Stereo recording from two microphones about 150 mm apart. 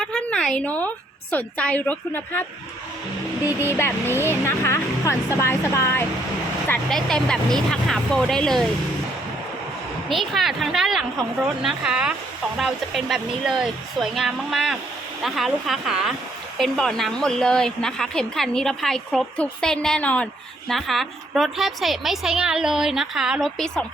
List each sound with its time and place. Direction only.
0.0 s a sound: 5° left (ahead or behind)
1.3 s speech: 10° left (ahead or behind)
3.8 s speech: 15° left (ahead or behind)
6.7 s a woman's voice: 5° left (ahead or behind)
10.1 s a woman's voice: centre (ahead or behind)